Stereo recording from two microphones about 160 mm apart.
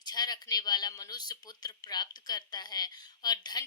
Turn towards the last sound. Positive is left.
turn(degrees=25)  # may be behind; listen again after turning